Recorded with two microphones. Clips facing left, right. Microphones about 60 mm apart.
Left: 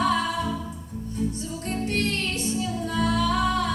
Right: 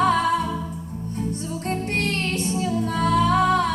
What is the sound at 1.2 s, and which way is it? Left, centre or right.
Music, right.